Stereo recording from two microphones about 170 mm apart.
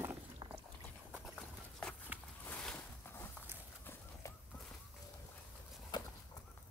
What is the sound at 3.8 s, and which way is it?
Horse, 15° left (ahead or behind).